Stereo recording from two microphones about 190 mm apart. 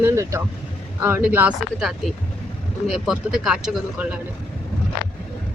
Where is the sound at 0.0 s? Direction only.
15° right (ahead or behind).